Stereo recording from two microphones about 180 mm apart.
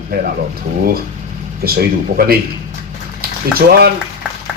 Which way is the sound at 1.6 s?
60° right (ahead or behind).